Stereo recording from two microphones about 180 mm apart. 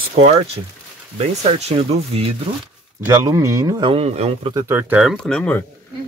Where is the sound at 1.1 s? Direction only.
35° right (ahead or behind).